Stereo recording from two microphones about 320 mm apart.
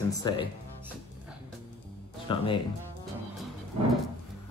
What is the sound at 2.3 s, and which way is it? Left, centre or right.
Speech, centre.